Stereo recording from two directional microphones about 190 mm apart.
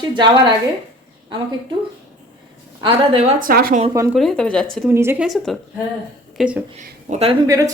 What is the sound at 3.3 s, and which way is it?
Speech, 50° right (ahead or behind).